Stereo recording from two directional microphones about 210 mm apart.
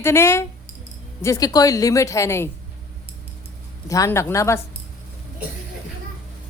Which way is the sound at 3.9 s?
15° left (ahead or behind).